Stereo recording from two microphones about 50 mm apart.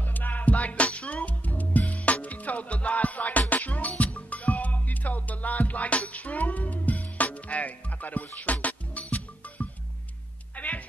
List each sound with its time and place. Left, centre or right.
0.0 s music: left